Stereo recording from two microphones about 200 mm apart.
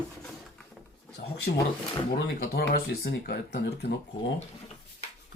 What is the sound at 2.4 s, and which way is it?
Speech, 50° left (ahead or behind).